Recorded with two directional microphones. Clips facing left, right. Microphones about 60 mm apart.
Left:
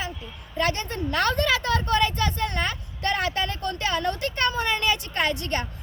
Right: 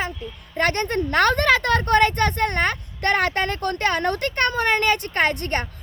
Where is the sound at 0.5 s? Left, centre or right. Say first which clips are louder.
Right 5 dB; right.